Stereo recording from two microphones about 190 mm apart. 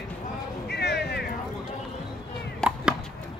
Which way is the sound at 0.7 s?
60° left (ahead or behind).